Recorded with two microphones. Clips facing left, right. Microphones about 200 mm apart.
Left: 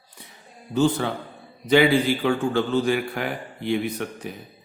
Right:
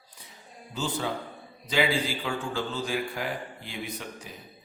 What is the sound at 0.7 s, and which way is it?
Speech, 65° left (ahead or behind).